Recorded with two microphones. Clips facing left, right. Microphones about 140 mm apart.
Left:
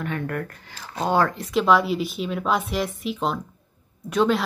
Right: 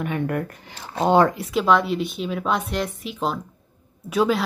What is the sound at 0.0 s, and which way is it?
Speech, 15° right (ahead or behind).